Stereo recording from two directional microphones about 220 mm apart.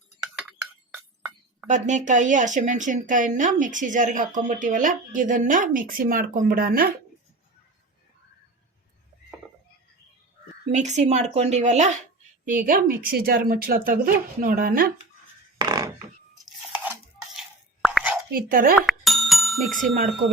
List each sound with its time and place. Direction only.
1.6 s speech: 35° right (ahead or behind)
10.7 s speech: 30° right (ahead or behind)
15.6 s a sound: 15° right (ahead or behind)
16.7 s stir: 5° right (ahead or behind)
17.8 s whispering: 5° right (ahead or behind)
18.3 s speech: 40° right (ahead or behind)
18.8 s music: centre (ahead or behind)